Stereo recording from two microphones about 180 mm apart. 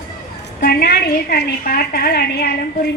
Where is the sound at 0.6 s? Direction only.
55° left (ahead or behind).